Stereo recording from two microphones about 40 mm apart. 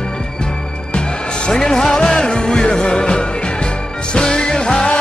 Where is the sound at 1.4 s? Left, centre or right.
Centre.